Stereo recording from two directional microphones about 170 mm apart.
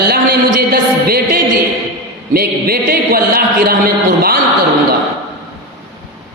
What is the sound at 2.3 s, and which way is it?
A woman's voice, 65° right (ahead or behind).